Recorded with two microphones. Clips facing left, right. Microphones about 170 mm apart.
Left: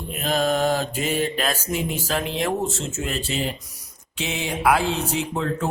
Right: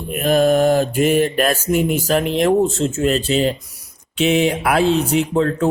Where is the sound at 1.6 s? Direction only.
55° right (ahead or behind).